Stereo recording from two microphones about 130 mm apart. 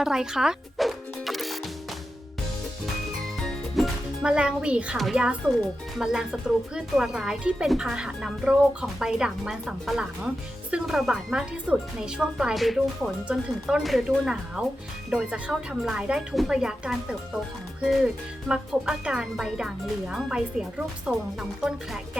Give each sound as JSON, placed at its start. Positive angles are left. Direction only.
{"t": 0.0, "sound": "speech", "side_deg": -5}
{"t": 3.4, "sound": "music", "side_deg": -5}
{"t": 6.0, "sound": "speech", "side_deg": -5}